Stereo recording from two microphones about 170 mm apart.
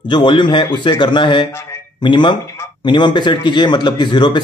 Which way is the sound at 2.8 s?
25° left (ahead or behind).